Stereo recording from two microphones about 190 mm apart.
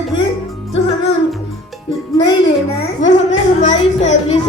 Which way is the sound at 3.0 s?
40° left (ahead or behind).